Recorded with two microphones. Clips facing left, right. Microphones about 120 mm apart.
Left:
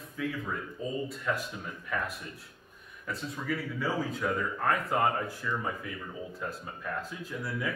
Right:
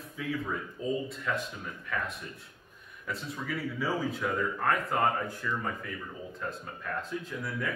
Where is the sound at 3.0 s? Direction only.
Centre (ahead or behind).